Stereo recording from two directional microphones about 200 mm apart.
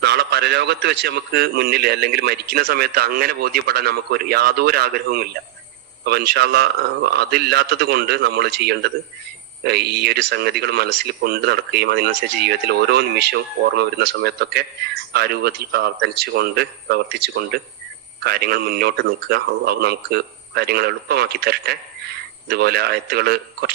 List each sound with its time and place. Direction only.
0.0 s a man's voice: 60° right (ahead or behind)